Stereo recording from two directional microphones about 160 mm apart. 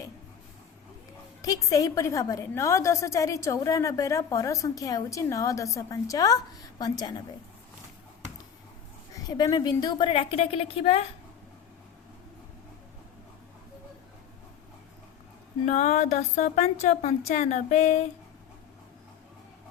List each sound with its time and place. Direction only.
1.4 s a woman's voice: 20° left (ahead or behind)
9.1 s a woman's voice: 25° left (ahead or behind); by 11.0 s 40° left (ahead or behind)
15.6 s speech: 50° left (ahead or behind)